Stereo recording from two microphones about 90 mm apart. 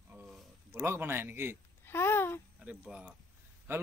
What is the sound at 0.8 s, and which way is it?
Speech, 25° right (ahead or behind).